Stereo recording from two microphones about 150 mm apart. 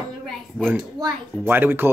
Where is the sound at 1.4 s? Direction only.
15° right (ahead or behind).